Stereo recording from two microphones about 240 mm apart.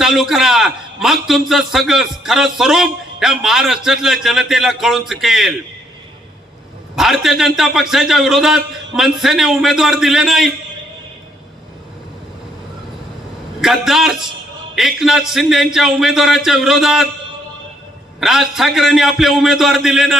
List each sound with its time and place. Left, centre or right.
0.0 s a man's voice: centre
7.0 s a man's voice: centre
13.6 s a man's voice: centre
18.2 s a man's voice: centre